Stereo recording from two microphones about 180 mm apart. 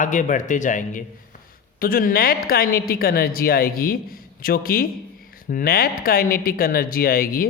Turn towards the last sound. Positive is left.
turn(degrees=55)  # may be behind; listen again after turning